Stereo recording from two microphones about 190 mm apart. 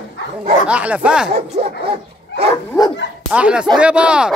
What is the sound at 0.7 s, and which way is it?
Speech, 5° right (ahead or behind).